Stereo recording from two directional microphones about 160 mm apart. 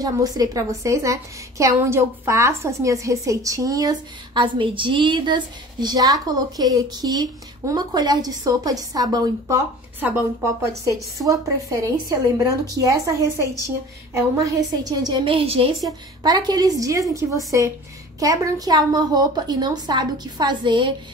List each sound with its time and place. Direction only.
0.0 s a woman's voice: 25° right (ahead or behind)
10.0 s a woman's voice: 10° right (ahead or behind)
18.2 s a woman's voice: 20° right (ahead or behind)